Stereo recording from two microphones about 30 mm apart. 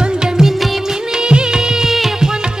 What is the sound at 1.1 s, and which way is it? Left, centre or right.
Music of bollywood, right.